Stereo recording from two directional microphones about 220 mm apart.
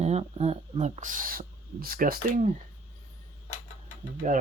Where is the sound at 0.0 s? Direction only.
30° right (ahead or behind).